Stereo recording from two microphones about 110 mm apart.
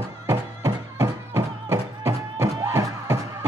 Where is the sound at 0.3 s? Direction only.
30° right (ahead or behind).